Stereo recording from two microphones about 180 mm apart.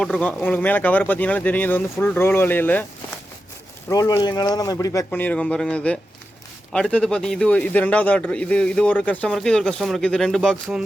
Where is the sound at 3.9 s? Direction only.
20° left (ahead or behind).